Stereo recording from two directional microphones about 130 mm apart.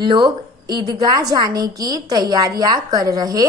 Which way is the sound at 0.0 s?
35° right (ahead or behind).